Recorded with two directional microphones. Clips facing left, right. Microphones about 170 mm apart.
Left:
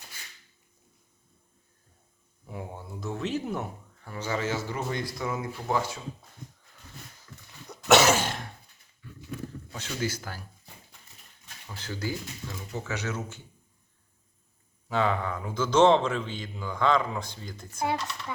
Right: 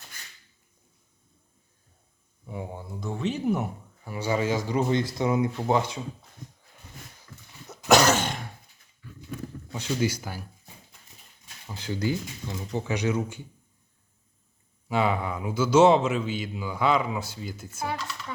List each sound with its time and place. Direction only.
2.5 s speech: centre (ahead or behind); by 6.0 s 20° right (ahead or behind)
7.7 s cough: centre (ahead or behind)
9.7 s speech: 15° right (ahead or behind)
11.7 s speech: 15° right (ahead or behind)
14.8 s speech: 10° right (ahead or behind)